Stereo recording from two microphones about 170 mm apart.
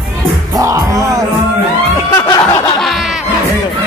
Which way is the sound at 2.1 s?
15° left (ahead or behind).